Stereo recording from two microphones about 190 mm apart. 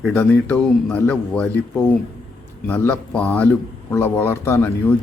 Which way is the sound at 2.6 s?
10° left (ahead or behind).